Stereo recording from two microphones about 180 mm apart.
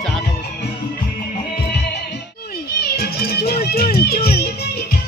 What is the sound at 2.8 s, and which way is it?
Music, 60° left (ahead or behind).